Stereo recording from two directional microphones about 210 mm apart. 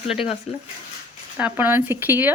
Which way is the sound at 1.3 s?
10° right (ahead or behind).